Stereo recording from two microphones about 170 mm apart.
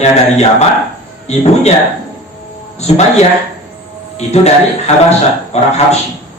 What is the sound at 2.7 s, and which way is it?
Speech, 40° left (ahead or behind).